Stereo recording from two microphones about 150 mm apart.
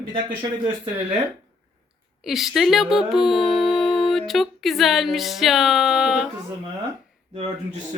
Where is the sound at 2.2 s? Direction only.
Centre (ahead or behind).